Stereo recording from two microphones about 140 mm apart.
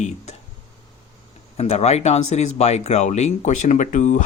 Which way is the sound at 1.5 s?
50° left (ahead or behind).